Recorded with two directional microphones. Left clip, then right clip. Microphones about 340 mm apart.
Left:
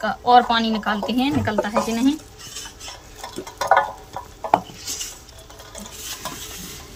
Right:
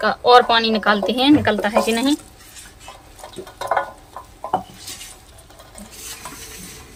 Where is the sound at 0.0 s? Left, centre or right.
Right.